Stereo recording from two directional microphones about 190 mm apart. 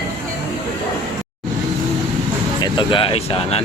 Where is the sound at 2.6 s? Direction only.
25° left (ahead or behind).